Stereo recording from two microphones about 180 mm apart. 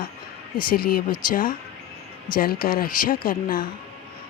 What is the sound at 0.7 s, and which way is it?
A woman's voice, 55° left (ahead or behind).